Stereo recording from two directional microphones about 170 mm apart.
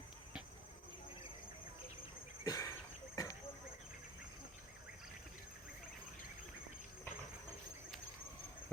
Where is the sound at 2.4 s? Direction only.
20° left (ahead or behind).